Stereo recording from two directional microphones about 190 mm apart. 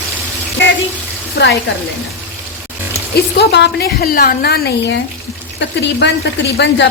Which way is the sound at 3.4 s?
65° left (ahead or behind).